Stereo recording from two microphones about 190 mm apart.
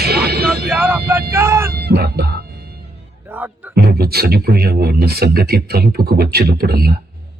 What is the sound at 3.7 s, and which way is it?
Speech, 55° right (ahead or behind).